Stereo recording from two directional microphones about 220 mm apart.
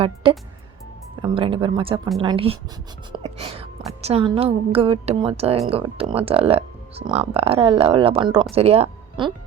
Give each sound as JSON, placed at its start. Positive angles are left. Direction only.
{"t": 0.0, "sound": "speech", "side_deg": -25}